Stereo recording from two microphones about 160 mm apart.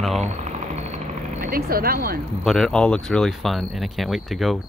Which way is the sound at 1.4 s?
65° right (ahead or behind).